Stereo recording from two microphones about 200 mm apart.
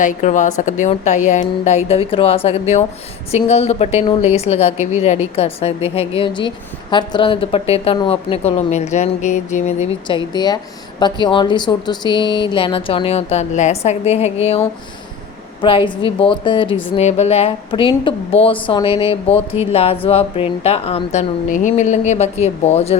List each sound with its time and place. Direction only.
0.0 s a woman's voice: 40° left (ahead or behind)
10.1 s a woman's voice: 20° left (ahead or behind)
15.6 s a woman's voice: 25° left (ahead or behind)